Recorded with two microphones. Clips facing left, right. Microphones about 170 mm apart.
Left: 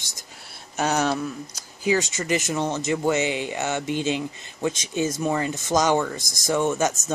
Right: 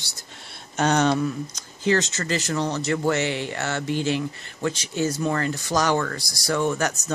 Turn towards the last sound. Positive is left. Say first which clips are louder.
# left 1 dB
turn(degrees=20)  # may be behind; listen again after turning